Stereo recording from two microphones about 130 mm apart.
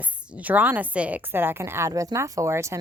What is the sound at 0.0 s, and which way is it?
A woman's voice, 10° right (ahead or behind).